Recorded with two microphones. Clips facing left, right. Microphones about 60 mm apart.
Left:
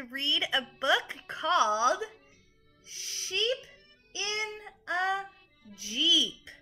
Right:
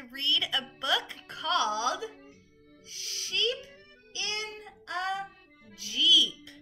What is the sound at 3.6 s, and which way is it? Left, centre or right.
Music, left.